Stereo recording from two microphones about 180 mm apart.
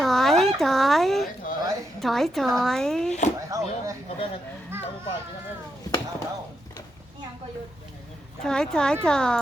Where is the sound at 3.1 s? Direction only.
40° left (ahead or behind).